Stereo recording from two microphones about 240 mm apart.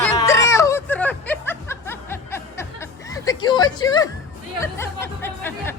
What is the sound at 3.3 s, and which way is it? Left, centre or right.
Speech, centre.